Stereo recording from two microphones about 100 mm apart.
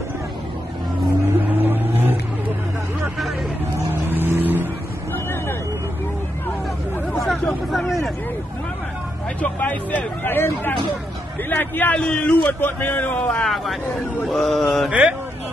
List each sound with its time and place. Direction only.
1.2 s vehicle: 20° right (ahead or behind)
3.9 s vehicle: 20° right (ahead or behind)
5.1 s vehicle: 20° left (ahead or behind)
7.7 s vehicle: centre (ahead or behind)
9.4 s hubbub: 15° left (ahead or behind)
11.4 s a man's voice: 20° left (ahead or behind)
14.2 s mantra: centre (ahead or behind)
14.9 s speech: 10° right (ahead or behind)